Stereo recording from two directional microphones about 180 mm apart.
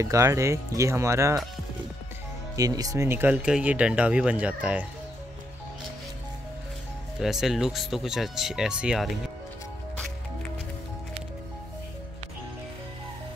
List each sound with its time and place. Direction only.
0.0 s speech: 15° right (ahead or behind)
2.5 s speech: 20° right (ahead or behind)
7.2 s speech: centre (ahead or behind)